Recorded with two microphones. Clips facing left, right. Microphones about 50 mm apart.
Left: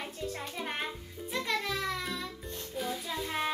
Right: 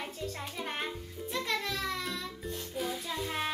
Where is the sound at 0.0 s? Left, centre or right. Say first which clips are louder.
Left 1 dB; centre.